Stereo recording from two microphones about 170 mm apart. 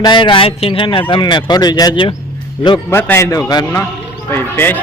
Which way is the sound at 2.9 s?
15° left (ahead or behind).